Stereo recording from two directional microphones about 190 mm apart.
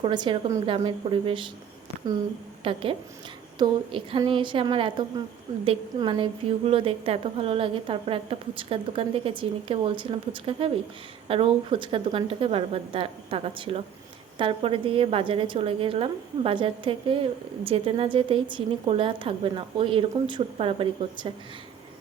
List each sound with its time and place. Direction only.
0.0 s a woman's voice: 25° right (ahead or behind)
2.6 s a woman's voice: 30° right (ahead or behind)